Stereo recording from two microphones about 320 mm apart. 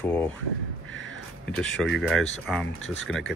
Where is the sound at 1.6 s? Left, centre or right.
Centre.